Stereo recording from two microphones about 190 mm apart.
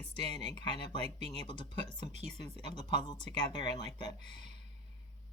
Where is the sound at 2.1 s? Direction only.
35° right (ahead or behind).